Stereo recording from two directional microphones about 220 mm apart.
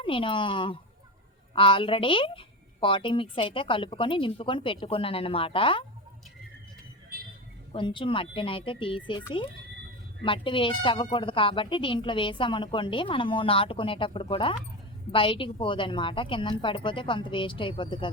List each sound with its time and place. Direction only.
0.0 s speech: 25° left (ahead or behind)
7.7 s speech: 20° left (ahead or behind)